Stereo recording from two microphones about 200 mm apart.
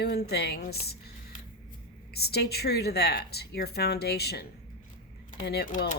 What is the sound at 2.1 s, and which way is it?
Speech, 55° left (ahead or behind).